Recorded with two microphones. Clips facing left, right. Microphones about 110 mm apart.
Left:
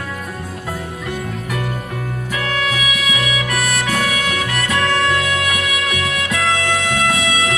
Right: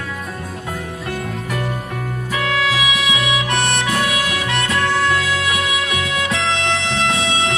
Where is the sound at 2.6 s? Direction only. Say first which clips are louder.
Right 2 dB; 30° right (ahead or behind).